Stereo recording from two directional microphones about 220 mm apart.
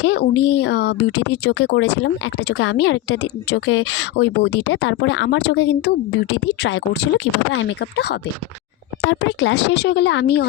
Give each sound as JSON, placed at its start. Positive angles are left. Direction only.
{"t": 0.0, "sound": "a woman's voice", "side_deg": 50}